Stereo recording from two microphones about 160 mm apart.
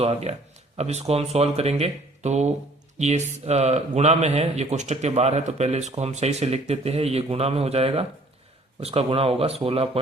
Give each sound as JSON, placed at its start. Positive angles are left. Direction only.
{"t": 0.0, "sound": "a man's voice", "side_deg": -40}